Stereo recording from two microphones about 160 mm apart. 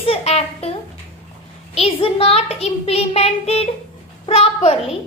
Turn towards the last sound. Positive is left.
turn(degrees=35)  # may be behind; listen again after turning